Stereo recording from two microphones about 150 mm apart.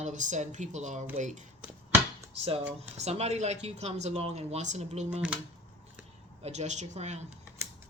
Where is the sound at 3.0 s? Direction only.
45° right (ahead or behind).